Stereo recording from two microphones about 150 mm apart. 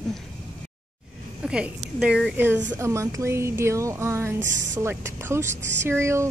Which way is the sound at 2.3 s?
15° right (ahead or behind).